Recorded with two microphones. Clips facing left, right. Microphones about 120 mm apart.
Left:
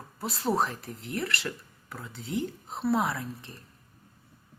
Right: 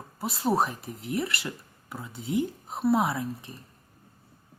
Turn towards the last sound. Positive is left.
turn(degrees=-15)  # may be behind; listen again after turning